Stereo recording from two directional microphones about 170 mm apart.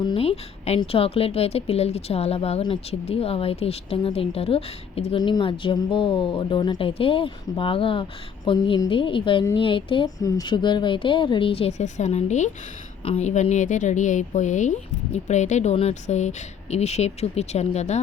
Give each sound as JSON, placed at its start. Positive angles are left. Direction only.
{"t": 0.0, "sound": "a woman's voice", "side_deg": 30}